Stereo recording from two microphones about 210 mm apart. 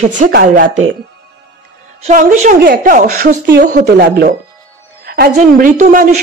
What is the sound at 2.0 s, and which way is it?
A woman's voice, 40° right (ahead or behind).